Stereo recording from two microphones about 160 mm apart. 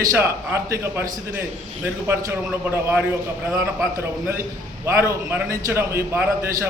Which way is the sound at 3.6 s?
15° right (ahead or behind).